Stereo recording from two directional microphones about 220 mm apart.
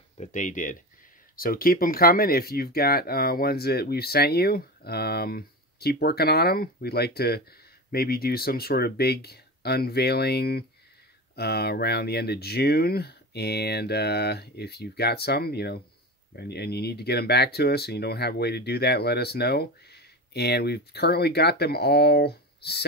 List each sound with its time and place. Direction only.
0.2 s speech: 35° left (ahead or behind)